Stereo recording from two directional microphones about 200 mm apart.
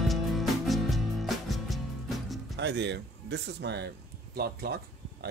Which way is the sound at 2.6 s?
60° right (ahead or behind).